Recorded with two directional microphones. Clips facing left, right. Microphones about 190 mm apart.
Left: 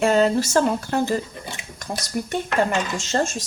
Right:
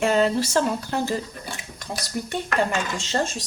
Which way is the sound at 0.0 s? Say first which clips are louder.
Left 2 dB; 45° left (ahead or behind).